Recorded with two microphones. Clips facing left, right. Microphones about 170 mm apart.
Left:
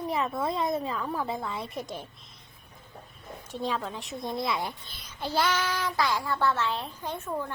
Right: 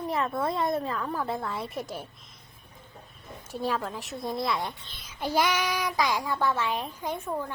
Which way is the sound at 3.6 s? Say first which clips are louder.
Right 2 dB; 5° right (ahead or behind).